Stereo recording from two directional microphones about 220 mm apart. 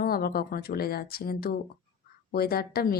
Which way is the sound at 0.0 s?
45° left (ahead or behind).